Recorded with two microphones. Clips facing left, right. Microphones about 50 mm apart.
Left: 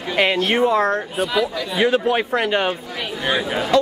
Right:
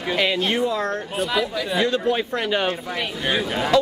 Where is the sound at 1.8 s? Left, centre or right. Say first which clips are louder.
Left 5 dB; centre.